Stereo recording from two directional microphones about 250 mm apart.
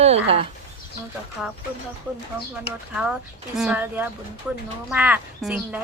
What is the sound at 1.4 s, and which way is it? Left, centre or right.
Speech, centre.